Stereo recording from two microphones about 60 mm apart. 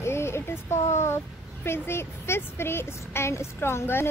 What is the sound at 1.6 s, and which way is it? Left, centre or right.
A woman's voice, left.